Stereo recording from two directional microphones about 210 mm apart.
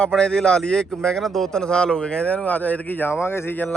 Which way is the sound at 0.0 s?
5° left (ahead or behind).